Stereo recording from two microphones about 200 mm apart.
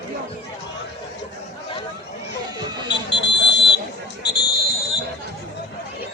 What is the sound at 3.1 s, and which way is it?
Buzzer, 60° left (ahead or behind).